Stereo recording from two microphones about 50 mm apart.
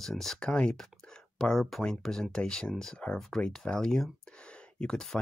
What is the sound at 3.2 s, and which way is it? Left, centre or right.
Speech, centre.